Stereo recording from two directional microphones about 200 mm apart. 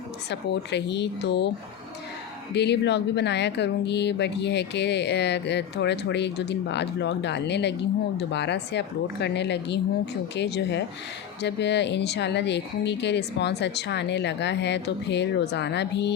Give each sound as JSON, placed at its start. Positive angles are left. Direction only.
{"t": 0.3, "sound": "speech", "side_deg": 60}
{"t": 2.5, "sound": "speech", "side_deg": 60}